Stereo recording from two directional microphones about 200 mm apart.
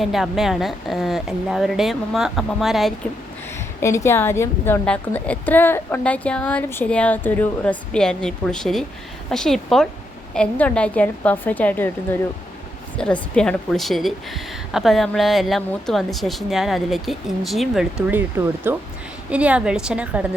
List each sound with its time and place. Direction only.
0.0 s a woman's voice: centre (ahead or behind)
3.8 s a woman's voice: 15° left (ahead or behind)
13.0 s a woman's voice: 5° left (ahead or behind)